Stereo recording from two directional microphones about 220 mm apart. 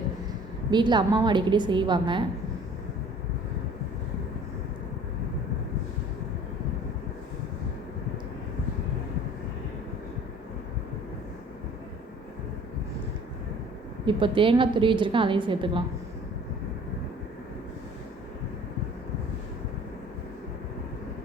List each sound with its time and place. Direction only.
0.7 s a woman's voice: 20° right (ahead or behind)
14.0 s a woman's voice: 20° right (ahead or behind)